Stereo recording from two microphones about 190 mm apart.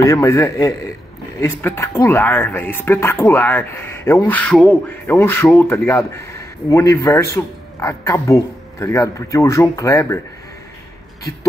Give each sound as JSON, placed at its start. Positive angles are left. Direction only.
{"t": 0.0, "sound": "speech", "side_deg": 15}